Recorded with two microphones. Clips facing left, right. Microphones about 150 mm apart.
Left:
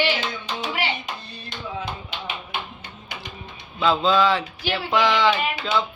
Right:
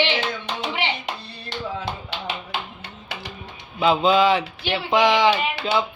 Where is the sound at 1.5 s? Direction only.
75° right (ahead or behind).